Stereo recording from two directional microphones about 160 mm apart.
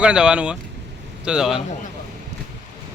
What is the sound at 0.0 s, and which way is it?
A man's voice, 5° right (ahead or behind).